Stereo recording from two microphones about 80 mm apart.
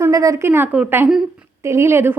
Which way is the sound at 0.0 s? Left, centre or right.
Right.